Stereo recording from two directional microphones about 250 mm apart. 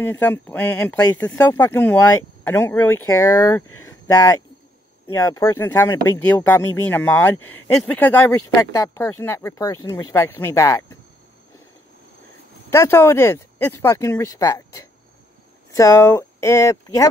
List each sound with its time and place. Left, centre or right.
0.0 s speech: centre
3.8 s a sound: centre
5.0 s speech: centre
12.6 s speech: centre